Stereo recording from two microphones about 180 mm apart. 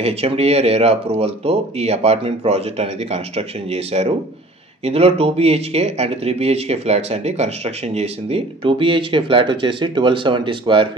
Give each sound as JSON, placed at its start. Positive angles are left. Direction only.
{"t": 0.0, "sound": "speech", "side_deg": -35}